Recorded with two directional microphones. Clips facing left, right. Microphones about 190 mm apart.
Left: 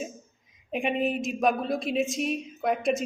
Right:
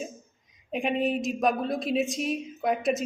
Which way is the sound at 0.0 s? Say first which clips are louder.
Left 1 dB; centre (ahead or behind).